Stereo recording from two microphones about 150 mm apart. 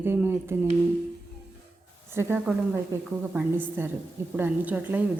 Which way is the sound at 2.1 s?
15° right (ahead or behind).